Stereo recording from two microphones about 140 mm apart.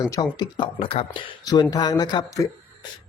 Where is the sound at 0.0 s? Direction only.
30° left (ahead or behind).